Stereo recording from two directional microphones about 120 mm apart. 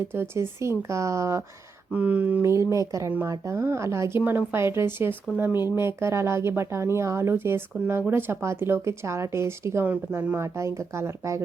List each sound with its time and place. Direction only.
0.1 s speech: 20° right (ahead or behind)
1.9 s speech: 10° right (ahead or behind)
2.4 s speech: 25° right (ahead or behind)